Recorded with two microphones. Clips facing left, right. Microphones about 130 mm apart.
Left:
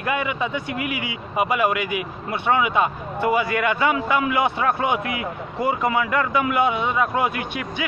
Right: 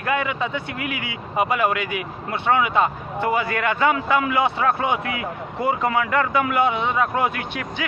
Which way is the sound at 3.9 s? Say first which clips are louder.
Even; 20° left (ahead or behind).